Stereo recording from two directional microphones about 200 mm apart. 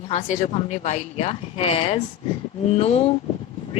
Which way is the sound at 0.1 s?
40° left (ahead or behind).